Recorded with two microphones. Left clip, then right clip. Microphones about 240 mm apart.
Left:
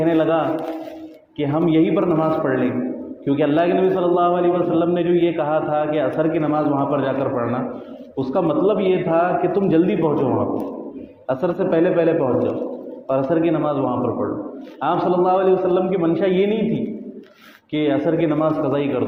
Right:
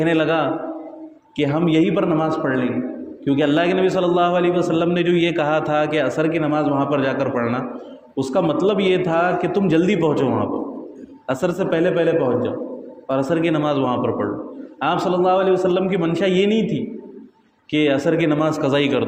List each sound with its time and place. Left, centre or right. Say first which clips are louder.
0.0 s a man's voice: even; right
11.3 s a man's voice: left 1 dB; right
17.7 s a man's voice: right 1 dB; right